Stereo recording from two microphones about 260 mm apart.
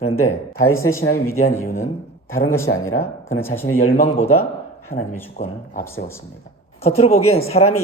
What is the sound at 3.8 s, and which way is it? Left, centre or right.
A man's voice, left.